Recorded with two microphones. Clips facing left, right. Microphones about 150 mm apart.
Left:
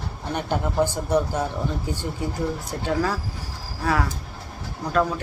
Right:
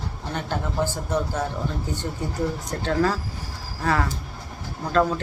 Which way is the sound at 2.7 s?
10° left (ahead or behind).